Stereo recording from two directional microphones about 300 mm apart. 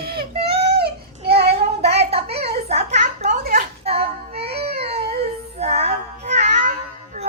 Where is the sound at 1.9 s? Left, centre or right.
Right.